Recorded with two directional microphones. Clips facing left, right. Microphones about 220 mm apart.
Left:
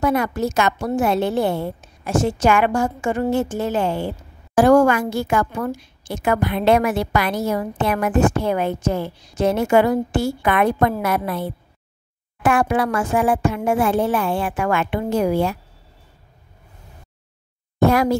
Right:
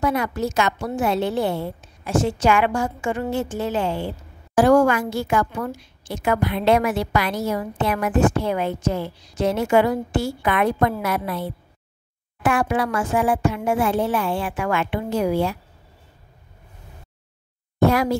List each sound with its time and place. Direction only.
0.0 s a woman's voice: 50° left (ahead or behind)
12.4 s a woman's voice: 50° left (ahead or behind)